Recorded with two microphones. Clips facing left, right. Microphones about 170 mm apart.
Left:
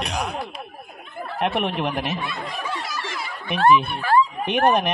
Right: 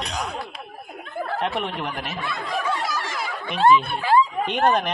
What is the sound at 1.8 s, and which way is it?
Speech, 20° left (ahead or behind).